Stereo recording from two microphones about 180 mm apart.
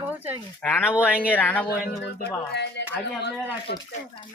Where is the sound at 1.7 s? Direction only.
65° left (ahead or behind).